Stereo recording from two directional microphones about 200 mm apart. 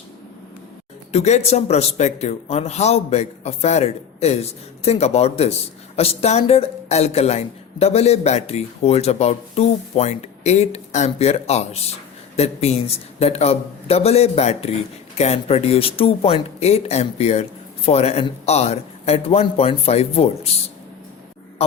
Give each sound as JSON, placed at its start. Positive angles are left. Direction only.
{"t": 1.1, "sound": "speech", "side_deg": 35}